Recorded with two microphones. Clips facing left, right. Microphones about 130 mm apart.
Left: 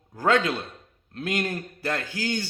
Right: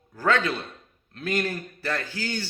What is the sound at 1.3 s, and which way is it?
A man's voice, 20° left (ahead or behind).